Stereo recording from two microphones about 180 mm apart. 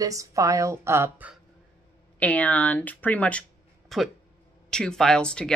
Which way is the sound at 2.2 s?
10° left (ahead or behind).